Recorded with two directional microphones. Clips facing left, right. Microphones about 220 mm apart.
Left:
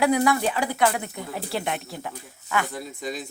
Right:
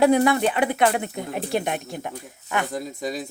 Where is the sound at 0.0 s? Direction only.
25° right (ahead or behind).